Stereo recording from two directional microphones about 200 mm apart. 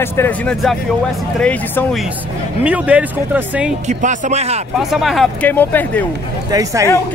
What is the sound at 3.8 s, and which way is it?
Speech, 35° right (ahead or behind).